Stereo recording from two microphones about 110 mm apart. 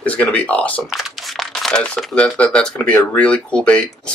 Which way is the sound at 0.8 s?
Centre (ahead or behind).